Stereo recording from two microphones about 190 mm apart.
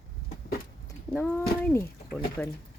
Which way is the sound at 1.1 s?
10° left (ahead or behind).